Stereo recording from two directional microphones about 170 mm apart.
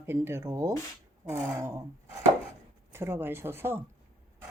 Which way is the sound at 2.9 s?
15° right (ahead or behind).